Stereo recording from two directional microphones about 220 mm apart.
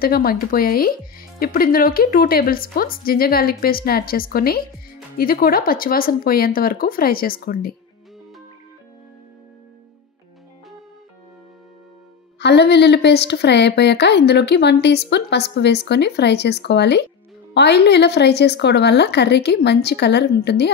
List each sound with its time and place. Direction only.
0.0 s speech: 40° left (ahead or behind)
12.4 s a woman's voice: 50° left (ahead or behind)